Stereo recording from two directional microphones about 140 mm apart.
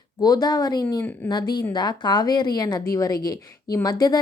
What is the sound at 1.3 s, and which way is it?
A woman's voice, 30° left (ahead or behind).